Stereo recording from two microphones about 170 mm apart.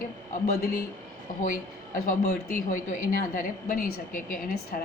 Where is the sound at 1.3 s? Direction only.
55° left (ahead or behind).